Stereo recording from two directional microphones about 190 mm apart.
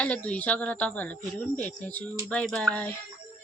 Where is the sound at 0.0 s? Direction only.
5° left (ahead or behind).